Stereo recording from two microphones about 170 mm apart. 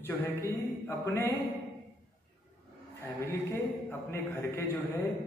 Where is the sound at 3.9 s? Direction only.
15° left (ahead or behind).